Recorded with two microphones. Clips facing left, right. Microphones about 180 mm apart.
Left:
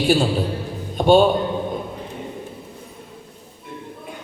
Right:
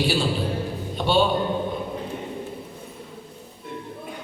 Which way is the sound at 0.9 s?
50° left (ahead or behind).